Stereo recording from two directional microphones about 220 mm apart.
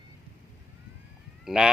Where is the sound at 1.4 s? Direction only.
Centre (ahead or behind).